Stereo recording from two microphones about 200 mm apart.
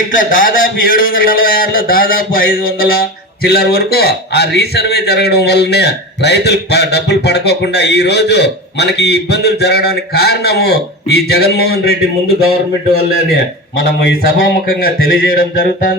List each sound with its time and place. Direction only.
0.1 s a man's voice: 45° left (ahead or behind)
14.7 s a man's voice: 45° left (ahead or behind)